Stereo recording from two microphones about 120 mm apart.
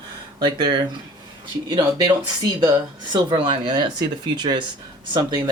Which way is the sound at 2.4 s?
35° right (ahead or behind).